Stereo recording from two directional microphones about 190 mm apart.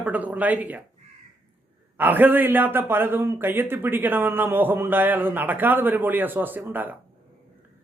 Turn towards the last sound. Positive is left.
turn(degrees=-10)  # may be behind; listen again after turning